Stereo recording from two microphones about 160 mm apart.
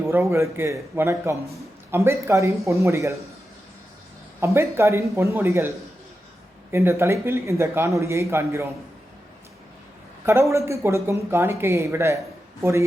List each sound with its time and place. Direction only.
0.1 s speech: 15° right (ahead or behind)
4.4 s speech: 15° right (ahead or behind)
10.2 s speech: 15° right (ahead or behind)